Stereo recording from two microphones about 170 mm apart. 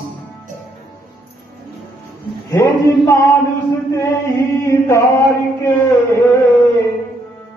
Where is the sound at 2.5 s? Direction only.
20° left (ahead or behind).